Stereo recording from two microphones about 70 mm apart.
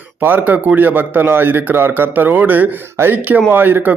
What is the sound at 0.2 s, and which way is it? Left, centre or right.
Speech, right.